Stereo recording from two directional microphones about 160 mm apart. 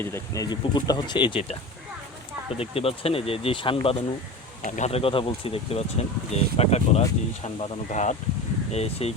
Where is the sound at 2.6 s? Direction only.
35° left (ahead or behind).